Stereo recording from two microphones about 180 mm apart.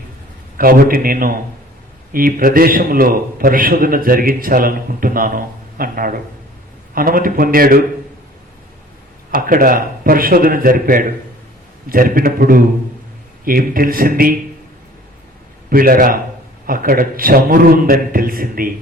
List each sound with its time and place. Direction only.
0.5 s a man's voice: 55° right (ahead or behind)
9.3 s a man's voice: 50° right (ahead or behind)
15.7 s a man's voice: 55° right (ahead or behind)